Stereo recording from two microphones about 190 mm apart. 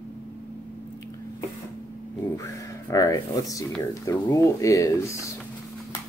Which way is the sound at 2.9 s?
15° left (ahead or behind).